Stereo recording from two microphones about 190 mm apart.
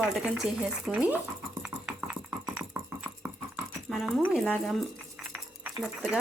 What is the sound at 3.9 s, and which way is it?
Dog, centre (ahead or behind).